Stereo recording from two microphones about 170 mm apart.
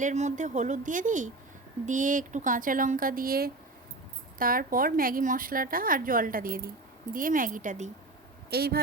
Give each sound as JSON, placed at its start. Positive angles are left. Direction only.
{"t": 0.0, "sound": "speech", "side_deg": -45}
{"t": 8.4, "sound": "speech", "side_deg": -70}